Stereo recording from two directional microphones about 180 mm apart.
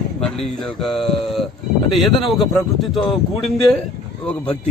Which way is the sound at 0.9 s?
30° left (ahead or behind).